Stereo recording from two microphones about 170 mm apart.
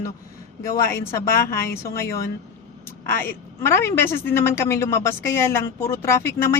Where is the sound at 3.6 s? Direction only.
15° left (ahead or behind).